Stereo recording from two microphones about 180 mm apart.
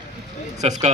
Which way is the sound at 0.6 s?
40° right (ahead or behind).